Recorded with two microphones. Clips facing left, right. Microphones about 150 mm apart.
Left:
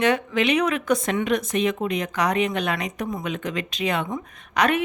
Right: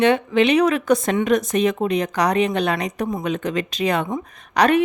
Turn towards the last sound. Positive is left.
turn(degrees=-35)  # may be behind; listen again after turning